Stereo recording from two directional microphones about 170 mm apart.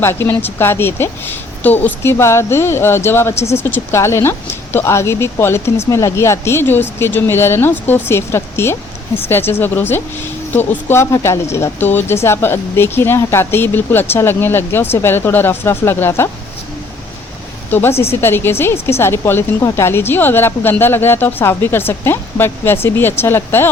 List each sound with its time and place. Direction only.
0.0 s a woman's voice: 15° left (ahead or behind)
17.7 s a woman's voice: 15° left (ahead or behind)